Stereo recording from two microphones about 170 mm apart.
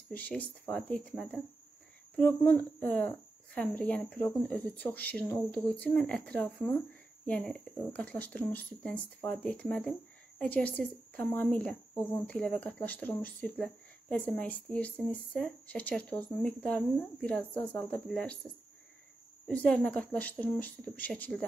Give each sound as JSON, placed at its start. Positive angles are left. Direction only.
{"t": 0.1, "sound": "speech", "side_deg": 10}
{"t": 19.4, "sound": "speech", "side_deg": 5}